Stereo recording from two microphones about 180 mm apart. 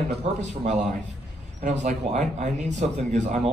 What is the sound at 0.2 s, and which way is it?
A man's voice, 40° right (ahead or behind).